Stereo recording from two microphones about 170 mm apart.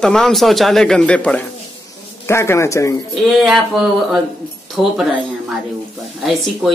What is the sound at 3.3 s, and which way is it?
Speech, centre (ahead or behind).